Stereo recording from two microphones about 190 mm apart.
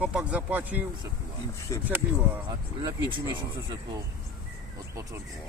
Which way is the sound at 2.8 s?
25° right (ahead or behind).